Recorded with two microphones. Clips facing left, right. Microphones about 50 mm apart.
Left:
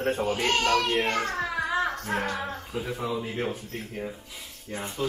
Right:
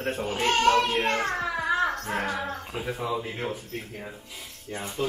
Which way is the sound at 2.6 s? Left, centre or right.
Centre.